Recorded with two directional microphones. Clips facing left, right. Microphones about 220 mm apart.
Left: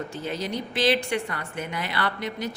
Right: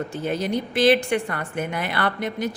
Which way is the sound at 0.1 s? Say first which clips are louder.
Right 5 dB; 50° right (ahead or behind).